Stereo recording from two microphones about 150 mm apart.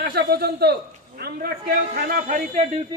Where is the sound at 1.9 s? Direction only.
60° right (ahead or behind).